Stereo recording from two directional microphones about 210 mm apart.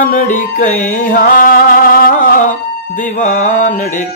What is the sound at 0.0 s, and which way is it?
Music, 40° left (ahead or behind).